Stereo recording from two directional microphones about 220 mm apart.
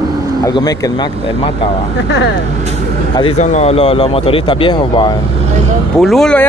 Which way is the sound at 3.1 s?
25° left (ahead or behind).